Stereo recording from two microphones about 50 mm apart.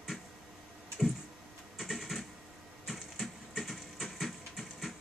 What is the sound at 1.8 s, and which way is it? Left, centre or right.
Typing, centre.